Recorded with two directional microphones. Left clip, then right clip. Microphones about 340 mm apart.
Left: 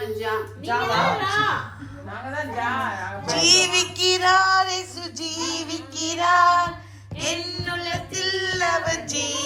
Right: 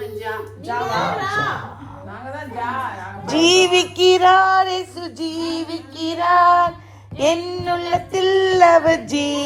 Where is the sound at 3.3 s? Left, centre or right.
Centre.